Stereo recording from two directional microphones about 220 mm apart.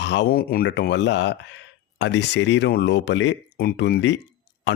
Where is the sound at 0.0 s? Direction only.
55° left (ahead or behind).